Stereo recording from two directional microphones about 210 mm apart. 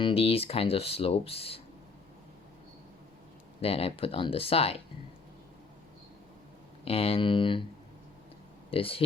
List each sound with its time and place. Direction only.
0.0 s speech: 25° left (ahead or behind)
3.6 s speech: 25° left (ahead or behind)
6.8 s speech: 25° left (ahead or behind)
8.7 s speech: 25° left (ahead or behind)